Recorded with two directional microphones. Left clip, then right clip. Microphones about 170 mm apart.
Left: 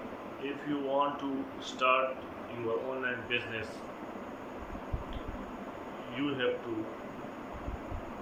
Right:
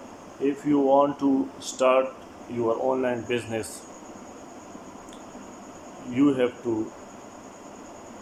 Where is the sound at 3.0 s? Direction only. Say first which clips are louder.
Right 6 dB; 35° right (ahead or behind).